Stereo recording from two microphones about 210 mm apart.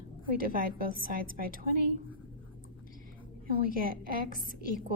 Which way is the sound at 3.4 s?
45° right (ahead or behind).